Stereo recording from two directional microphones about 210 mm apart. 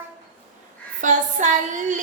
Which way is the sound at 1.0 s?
35° right (ahead or behind).